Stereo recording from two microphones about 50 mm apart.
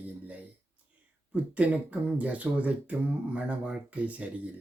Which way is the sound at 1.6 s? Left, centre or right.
Right.